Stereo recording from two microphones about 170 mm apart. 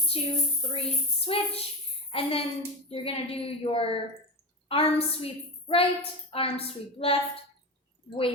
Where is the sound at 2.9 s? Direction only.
35° left (ahead or behind).